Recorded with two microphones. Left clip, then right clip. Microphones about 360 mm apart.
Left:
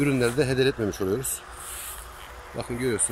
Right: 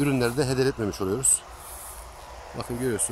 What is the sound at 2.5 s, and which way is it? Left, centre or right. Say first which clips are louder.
Speech: left 1 dB; centre.